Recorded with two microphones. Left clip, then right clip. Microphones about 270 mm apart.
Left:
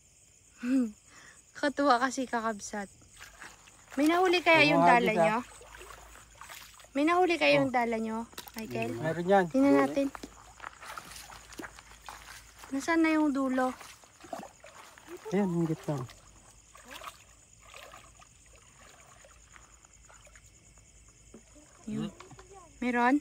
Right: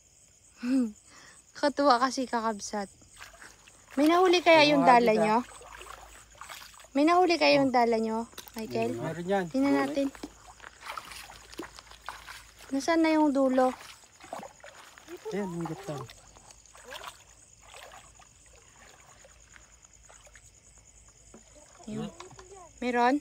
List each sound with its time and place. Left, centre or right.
0.6 s a woman's voice: centre
9.0 s speech: centre
9.5 s speech: centre
10.9 s boat: centre
12.0 s a sound: centre
12.7 s a sound: centre
16.7 s rowboat: centre
21.8 s a sound: centre
22.1 s wild animals: right
22.8 s speech: centre